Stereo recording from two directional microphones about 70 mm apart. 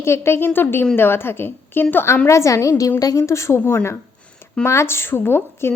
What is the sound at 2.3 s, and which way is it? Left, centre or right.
Speech, left.